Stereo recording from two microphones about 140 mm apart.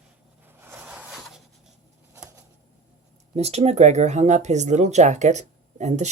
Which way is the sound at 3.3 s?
50° right (ahead or behind).